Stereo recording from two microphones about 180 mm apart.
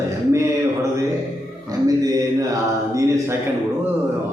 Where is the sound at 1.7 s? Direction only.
20° right (ahead or behind).